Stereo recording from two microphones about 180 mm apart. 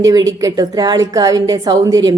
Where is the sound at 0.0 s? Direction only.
20° right (ahead or behind).